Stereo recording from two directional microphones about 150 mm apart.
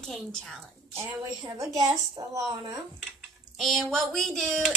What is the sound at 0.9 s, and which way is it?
A woman's voice, 20° right (ahead or behind).